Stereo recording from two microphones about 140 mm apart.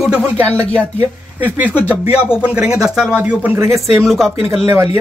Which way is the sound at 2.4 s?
5° right (ahead or behind).